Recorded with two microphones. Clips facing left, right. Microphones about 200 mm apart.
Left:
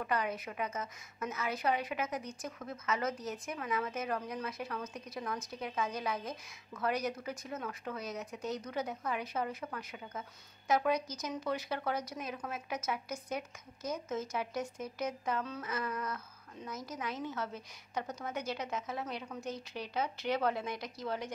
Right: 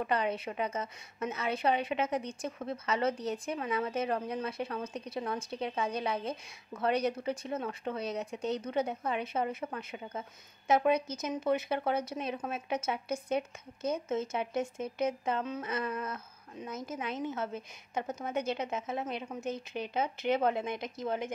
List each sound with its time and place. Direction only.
0.0 s a woman's voice: 25° right (ahead or behind)